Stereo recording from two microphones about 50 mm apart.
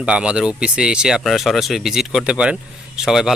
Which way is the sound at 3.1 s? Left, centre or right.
Centre.